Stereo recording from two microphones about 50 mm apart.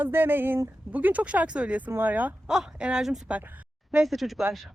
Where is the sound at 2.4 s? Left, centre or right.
Centre.